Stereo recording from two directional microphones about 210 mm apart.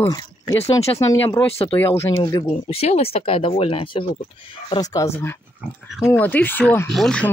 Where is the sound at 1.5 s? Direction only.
30° left (ahead or behind).